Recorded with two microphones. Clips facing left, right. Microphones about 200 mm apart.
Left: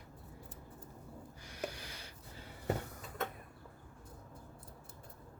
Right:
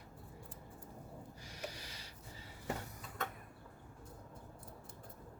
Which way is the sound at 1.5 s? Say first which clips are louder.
Left 6 dB; 55° left (ahead or behind).